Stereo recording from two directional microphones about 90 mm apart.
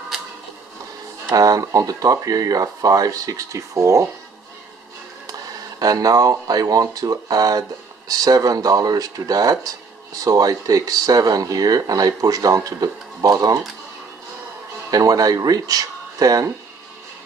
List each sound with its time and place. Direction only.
1.3 s speech: 40° right (ahead or behind)
5.8 s speech: 45° right (ahead or behind)
14.9 s speech: 45° right (ahead or behind)